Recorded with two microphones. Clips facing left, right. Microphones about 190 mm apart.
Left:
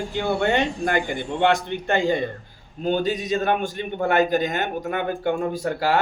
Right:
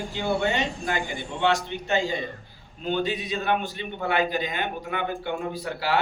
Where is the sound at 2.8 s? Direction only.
40° left (ahead or behind).